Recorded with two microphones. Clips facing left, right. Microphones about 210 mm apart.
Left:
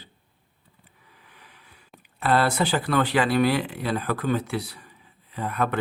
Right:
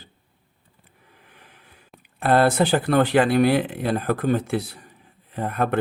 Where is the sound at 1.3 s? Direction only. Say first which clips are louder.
Right 1 dB; 50° right (ahead or behind).